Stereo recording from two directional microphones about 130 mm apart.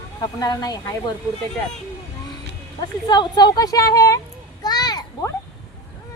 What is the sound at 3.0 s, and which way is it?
A woman's voice, 30° left (ahead or behind).